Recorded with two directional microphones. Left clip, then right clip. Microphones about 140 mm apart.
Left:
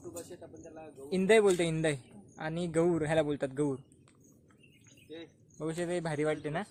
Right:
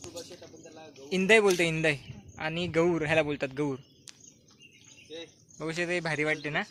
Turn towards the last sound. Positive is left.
turn(degrees=-30)  # may be behind; listen again after turning